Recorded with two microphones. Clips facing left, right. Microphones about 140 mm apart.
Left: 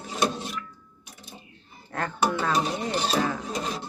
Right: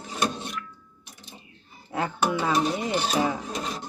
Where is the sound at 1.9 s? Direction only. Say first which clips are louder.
Right 1 dB; 10° right (ahead or behind).